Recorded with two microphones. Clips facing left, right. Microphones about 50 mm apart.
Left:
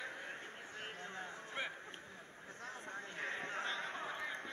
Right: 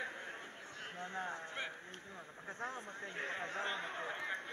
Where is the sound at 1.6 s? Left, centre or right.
Centre.